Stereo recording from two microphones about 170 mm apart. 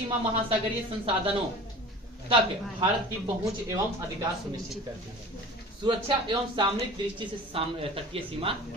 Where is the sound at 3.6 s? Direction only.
15° right (ahead or behind).